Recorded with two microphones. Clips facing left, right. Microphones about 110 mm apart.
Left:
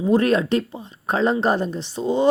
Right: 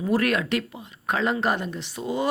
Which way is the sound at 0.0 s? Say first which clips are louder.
Left 5 dB; 25° left (ahead or behind).